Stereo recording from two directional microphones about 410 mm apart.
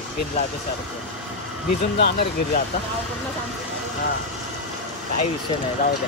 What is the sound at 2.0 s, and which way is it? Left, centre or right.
Speech, left.